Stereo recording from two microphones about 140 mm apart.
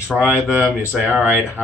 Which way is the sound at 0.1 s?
10° right (ahead or behind).